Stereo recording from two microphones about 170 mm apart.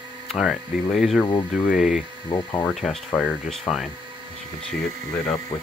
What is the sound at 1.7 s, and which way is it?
Speech, 5° right (ahead or behind).